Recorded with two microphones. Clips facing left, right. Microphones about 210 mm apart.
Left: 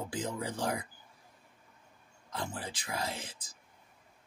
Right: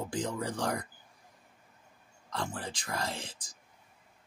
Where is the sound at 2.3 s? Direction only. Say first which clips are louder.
Right 2 dB; 5° left (ahead or behind).